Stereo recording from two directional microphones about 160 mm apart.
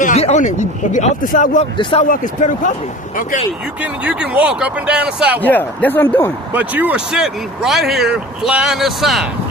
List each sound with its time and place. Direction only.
0.0 s speech: 45° left (ahead or behind)
1.8 s speech: 35° left (ahead or behind)
2.0 s speech: 55° left (ahead or behind)
3.8 s speech: 5° right (ahead or behind)
5.4 s speech: 10° left (ahead or behind)
6.5 s speech: 10° right (ahead or behind)